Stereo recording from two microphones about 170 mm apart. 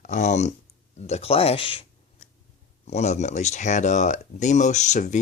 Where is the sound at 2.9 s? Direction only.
40° left (ahead or behind).